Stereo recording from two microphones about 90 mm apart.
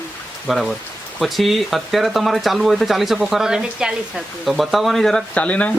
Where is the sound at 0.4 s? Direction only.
Centre (ahead or behind); by 5.7 s 15° left (ahead or behind).